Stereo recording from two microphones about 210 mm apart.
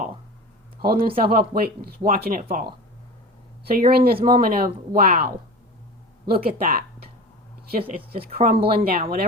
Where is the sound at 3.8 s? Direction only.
45° right (ahead or behind).